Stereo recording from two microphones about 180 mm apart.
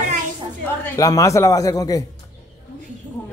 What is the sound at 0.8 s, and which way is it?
A woman's voice, 20° left (ahead or behind).